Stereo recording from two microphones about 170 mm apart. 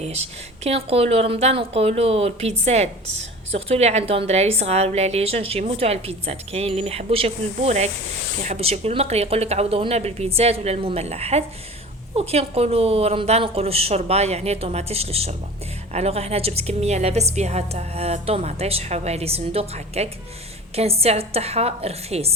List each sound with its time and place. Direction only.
0.0 s speech: 40° right (ahead or behind)